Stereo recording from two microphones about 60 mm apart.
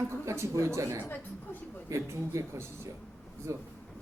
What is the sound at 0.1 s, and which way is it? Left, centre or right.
A man's voice, right.